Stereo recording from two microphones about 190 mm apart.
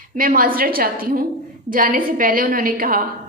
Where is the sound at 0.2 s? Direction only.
45° right (ahead or behind).